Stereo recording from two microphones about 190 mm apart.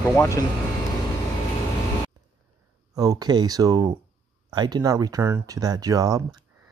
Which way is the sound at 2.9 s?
20° right (ahead or behind).